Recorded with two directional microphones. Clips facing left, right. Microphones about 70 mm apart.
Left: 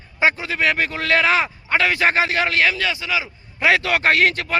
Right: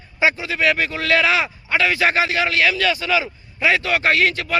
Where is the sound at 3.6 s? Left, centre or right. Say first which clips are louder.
Left 1 dB; left.